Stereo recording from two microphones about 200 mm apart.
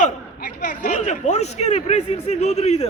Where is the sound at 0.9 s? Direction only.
35° left (ahead or behind).